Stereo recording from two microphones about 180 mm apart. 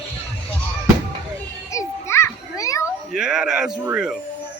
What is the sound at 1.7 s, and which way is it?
Children playing, 15° left (ahead or behind).